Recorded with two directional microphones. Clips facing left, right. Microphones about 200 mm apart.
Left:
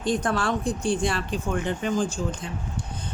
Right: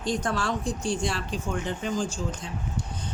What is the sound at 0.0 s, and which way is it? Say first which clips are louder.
A man's voice: left 3 dB; 55° left (ahead or behind).